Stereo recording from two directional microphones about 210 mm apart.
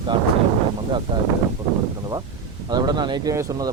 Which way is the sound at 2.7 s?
20° right (ahead or behind).